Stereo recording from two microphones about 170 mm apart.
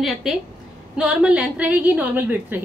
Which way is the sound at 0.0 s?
Centre (ahead or behind).